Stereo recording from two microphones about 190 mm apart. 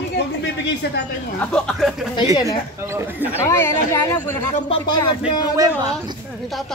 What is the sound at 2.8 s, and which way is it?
Speech, 10° right (ahead or behind).